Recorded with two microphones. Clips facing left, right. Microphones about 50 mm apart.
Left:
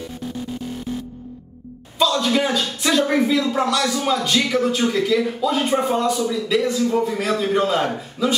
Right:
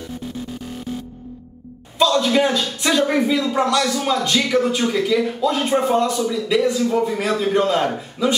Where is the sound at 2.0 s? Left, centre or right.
Centre.